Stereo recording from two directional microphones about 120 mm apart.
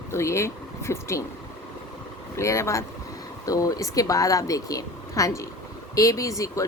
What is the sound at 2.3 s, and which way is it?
Speech, 25° left (ahead or behind).